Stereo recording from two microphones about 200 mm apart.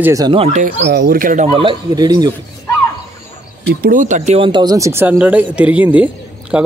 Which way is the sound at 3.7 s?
45° right (ahead or behind).